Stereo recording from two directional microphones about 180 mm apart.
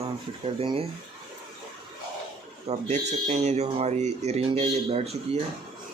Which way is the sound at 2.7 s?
35° right (ahead or behind).